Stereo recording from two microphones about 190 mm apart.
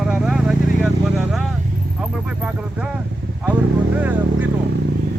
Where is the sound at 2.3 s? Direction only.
5° right (ahead or behind).